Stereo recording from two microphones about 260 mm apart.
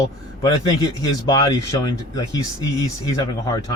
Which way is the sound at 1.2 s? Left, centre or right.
Centre.